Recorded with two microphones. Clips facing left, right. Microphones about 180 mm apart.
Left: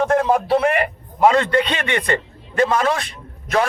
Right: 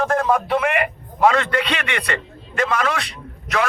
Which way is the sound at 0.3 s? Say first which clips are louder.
Left 3 dB; 35° left (ahead or behind).